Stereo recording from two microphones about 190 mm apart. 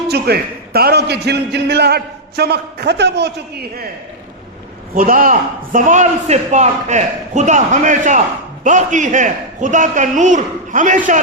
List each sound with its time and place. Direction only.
0.1 s a man's voice: 55° right (ahead or behind)
4.9 s a man's voice: 45° right (ahead or behind)